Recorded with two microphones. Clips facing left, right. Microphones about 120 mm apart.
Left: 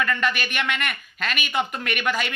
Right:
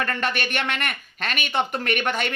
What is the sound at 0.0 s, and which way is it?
Speech, 35° right (ahead or behind).